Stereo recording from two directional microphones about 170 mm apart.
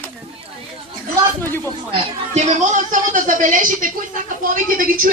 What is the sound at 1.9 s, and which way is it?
Speech, 40° right (ahead or behind).